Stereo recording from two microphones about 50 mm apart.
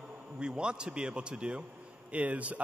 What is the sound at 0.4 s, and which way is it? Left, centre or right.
Speech, centre.